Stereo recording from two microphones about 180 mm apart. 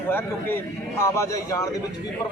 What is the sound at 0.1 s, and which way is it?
A man's voice, 10° left (ahead or behind).